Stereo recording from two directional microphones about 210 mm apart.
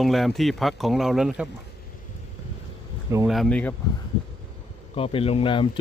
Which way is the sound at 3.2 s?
Centre (ahead or behind).